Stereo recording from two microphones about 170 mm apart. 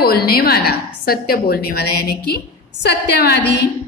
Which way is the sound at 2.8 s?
80° left.